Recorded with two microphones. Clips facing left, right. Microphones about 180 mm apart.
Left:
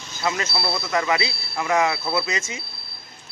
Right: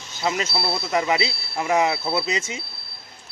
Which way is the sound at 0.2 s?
20° right (ahead or behind).